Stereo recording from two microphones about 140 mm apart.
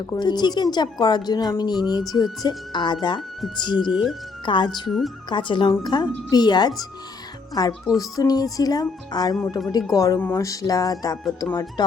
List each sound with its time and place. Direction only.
0.0 s speech: 30° left (ahead or behind)
4.9 s speech: centre (ahead or behind)
5.3 s speech: 35° left (ahead or behind)